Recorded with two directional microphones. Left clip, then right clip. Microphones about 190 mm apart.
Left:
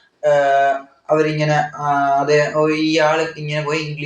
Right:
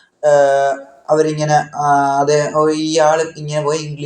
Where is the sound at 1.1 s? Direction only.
25° right (ahead or behind).